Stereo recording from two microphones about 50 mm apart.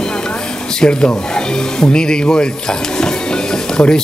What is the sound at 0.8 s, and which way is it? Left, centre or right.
Speech, centre.